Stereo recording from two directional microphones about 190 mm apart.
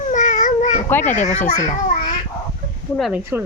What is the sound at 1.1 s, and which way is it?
Speech, 40° left (ahead or behind).